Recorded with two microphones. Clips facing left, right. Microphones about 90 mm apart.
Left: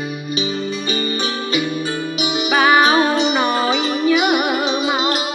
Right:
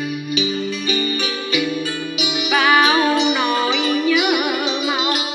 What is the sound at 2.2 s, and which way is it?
Music, 25° left (ahead or behind).